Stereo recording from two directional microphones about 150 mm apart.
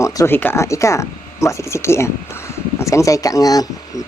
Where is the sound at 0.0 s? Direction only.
20° left (ahead or behind).